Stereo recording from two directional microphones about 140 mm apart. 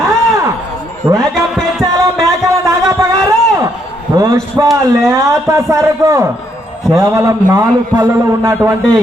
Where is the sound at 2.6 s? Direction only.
20° right (ahead or behind).